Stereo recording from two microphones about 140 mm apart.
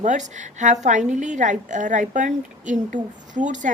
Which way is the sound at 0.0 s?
60° right (ahead or behind).